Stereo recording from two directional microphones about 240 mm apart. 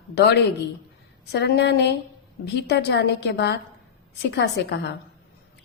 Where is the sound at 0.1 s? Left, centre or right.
Left.